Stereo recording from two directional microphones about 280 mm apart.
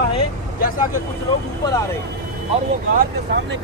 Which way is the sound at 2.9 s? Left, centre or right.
Right.